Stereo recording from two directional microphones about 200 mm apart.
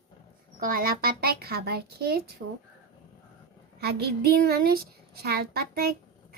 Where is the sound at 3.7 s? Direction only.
55° right (ahead or behind).